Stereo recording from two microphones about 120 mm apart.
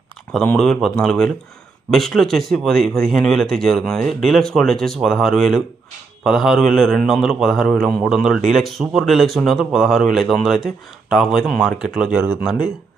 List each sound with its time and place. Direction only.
0.4 s speech: 5° left (ahead or behind)
12.2 s speech: 15° right (ahead or behind)